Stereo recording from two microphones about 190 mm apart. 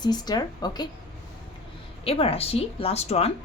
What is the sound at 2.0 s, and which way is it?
A woman's voice, 30° left (ahead or behind).